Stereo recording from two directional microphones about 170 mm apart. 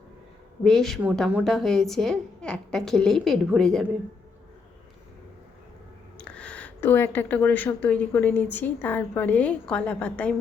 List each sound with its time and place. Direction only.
0.6 s a woman's voice: centre (ahead or behind)
6.1 s speech: 5° left (ahead or behind)